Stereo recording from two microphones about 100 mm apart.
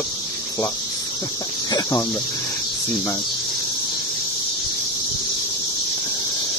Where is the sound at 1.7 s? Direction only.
35° left (ahead or behind).